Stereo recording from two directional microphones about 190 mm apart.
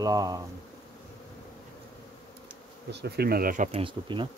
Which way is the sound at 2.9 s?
60° right (ahead or behind).